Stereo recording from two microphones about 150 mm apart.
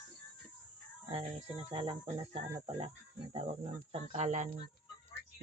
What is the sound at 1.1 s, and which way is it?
Speech, 40° right (ahead or behind).